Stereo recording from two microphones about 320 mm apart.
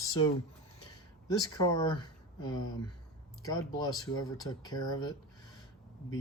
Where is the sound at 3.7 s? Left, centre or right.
Centre.